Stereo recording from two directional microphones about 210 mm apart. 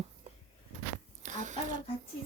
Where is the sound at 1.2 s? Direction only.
35° right (ahead or behind).